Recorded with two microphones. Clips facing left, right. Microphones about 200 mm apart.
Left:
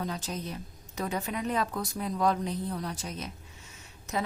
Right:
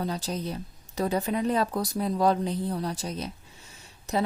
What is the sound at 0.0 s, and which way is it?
A woman's voice, 35° right (ahead or behind).